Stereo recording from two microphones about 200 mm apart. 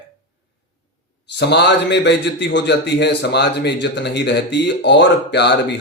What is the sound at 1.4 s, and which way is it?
A man's voice, 60° left (ahead or behind).